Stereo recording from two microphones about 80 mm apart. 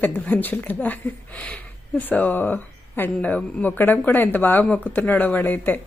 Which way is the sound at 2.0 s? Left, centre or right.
Left.